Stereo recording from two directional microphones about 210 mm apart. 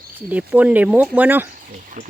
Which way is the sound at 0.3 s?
5° right (ahead or behind).